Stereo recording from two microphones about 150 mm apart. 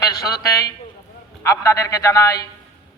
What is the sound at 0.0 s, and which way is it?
A man's voice, 20° left (ahead or behind).